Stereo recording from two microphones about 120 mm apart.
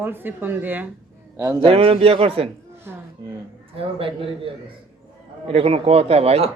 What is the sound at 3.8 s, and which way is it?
Speech, 50° right (ahead or behind).